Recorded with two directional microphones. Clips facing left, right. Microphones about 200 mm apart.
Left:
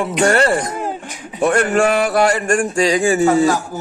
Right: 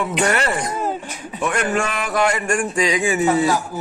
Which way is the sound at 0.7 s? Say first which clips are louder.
Even; 15° left (ahead or behind).